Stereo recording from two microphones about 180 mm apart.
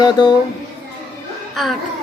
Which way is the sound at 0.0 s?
25° left (ahead or behind).